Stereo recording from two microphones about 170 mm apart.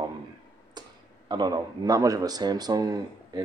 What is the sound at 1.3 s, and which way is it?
Speech, 25° right (ahead or behind).